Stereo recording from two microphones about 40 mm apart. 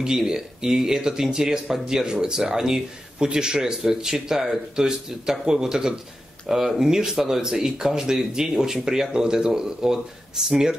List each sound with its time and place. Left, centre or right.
0.0 s speech: centre